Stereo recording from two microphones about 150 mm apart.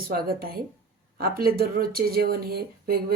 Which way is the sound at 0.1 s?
85° right.